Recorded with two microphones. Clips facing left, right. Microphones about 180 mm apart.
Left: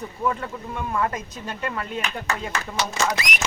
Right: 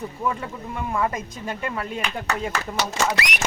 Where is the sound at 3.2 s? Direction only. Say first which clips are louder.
Right 2 dB; 65° right (ahead or behind).